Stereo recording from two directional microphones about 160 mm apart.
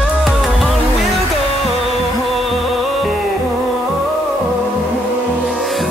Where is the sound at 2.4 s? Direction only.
Centre (ahead or behind).